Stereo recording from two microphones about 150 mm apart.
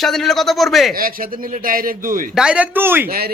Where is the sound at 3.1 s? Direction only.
90° right.